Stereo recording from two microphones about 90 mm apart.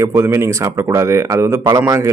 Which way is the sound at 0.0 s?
30° right (ahead or behind).